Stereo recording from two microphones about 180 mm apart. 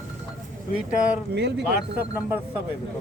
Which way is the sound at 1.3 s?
70° right (ahead or behind).